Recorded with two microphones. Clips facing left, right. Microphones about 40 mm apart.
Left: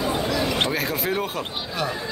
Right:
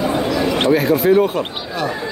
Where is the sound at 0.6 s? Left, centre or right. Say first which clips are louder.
Right 9 dB; centre.